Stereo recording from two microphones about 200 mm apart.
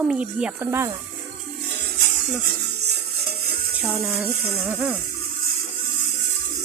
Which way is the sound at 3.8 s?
Centre (ahead or behind).